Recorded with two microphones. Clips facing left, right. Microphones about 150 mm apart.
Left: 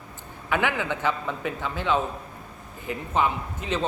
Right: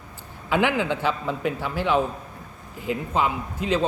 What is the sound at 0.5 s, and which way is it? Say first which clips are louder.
A man's voice: right 4 dB; 20° right (ahead or behind).